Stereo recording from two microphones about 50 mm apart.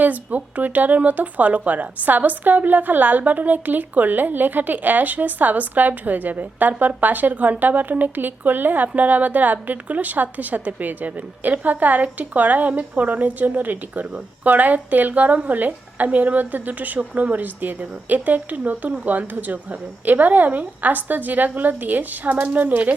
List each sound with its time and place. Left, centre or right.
0.0 s speech: right